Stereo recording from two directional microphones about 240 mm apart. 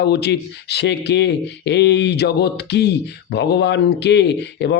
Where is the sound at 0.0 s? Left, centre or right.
Left.